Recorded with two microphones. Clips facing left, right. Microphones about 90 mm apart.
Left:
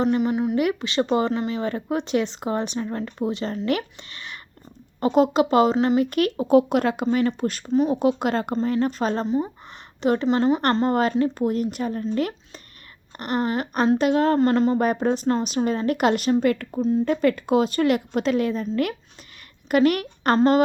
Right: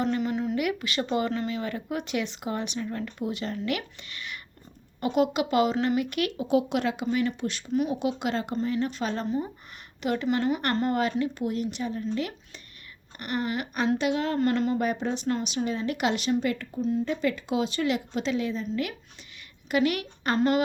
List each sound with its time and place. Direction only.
0.0 s speech: 20° left (ahead or behind)
0.5 s speech: 30° left (ahead or behind)
5.7 s speech: 25° left (ahead or behind)
6.0 s speech: 40° left (ahead or behind)
7.7 s speech: 30° left (ahead or behind)
9.2 s speech: 20° left (ahead or behind)
10.0 s speech: 35° left (ahead or behind)
14.3 s speech: 30° left (ahead or behind)
14.8 s a woman's voice: 45° left (ahead or behind)